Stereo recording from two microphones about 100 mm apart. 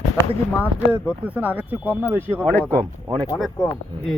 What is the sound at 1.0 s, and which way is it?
Speech, 15° right (ahead or behind).